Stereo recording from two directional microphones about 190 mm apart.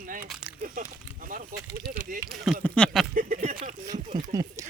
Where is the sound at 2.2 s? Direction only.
Centre (ahead or behind).